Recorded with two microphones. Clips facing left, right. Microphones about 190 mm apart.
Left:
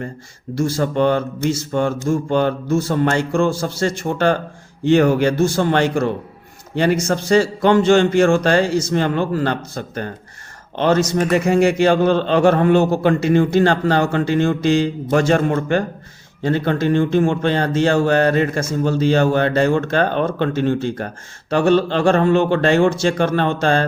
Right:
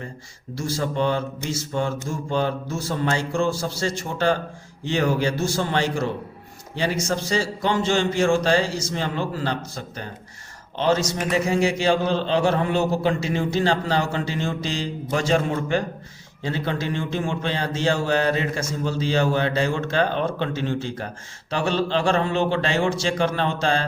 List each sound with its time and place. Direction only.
0.5 s a man's voice: 60° left (ahead or behind)